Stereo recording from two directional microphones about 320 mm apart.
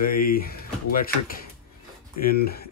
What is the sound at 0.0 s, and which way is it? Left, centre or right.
Speech, left.